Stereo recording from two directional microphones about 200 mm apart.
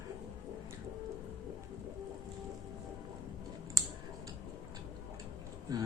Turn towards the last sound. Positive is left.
turn(degrees=-15)  # may be behind; listen again after turning